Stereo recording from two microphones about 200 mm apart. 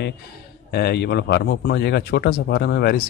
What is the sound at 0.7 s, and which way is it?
A man's voice, 55° left (ahead or behind).